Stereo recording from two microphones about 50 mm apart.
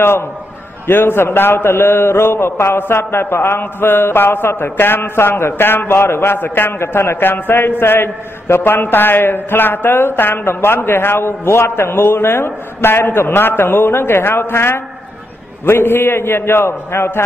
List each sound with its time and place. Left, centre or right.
0.8 s a man's voice: left